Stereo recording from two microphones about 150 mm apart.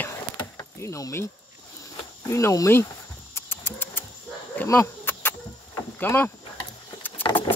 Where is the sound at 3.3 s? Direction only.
15° left (ahead or behind).